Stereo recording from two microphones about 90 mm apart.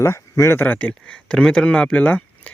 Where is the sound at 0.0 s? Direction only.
30° left (ahead or behind).